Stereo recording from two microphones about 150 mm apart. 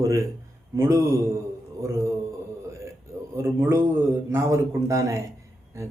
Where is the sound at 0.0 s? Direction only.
20° right (ahead or behind).